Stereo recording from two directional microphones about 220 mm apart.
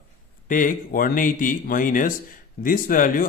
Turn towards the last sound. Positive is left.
turn(degrees=40)  # may be behind; listen again after turning